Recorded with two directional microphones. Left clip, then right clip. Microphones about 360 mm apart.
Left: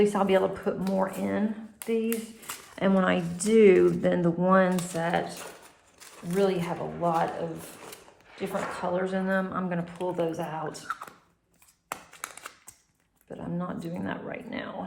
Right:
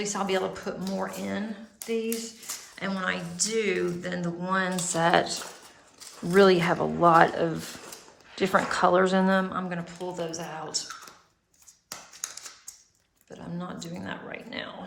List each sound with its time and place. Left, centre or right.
0.0 s speech: centre
8.4 s speech: centre
13.3 s speech: centre